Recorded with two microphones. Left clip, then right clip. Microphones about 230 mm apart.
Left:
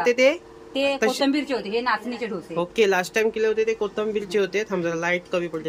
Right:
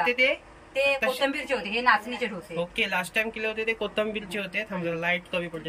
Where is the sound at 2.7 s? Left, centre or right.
Centre.